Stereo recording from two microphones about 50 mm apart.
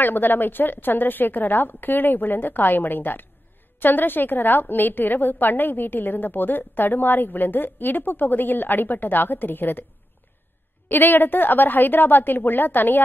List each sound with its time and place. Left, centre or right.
0.0 s a woman's voice: left
10.9 s a woman's voice: left